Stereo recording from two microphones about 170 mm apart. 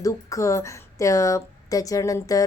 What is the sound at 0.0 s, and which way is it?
A woman's voice, 20° left (ahead or behind).